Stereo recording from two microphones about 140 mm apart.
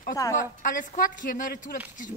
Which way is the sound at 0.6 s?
75° left (ahead or behind).